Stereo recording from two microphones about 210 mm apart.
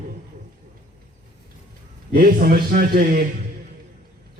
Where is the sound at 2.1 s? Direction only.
45° right (ahead or behind).